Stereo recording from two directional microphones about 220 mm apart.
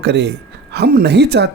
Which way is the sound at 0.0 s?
50° right (ahead or behind).